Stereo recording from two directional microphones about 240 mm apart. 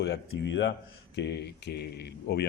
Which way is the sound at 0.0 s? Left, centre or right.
Left.